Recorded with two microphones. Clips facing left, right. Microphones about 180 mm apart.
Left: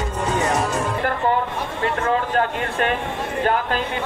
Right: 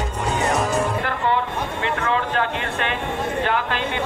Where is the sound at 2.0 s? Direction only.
45° left (ahead or behind).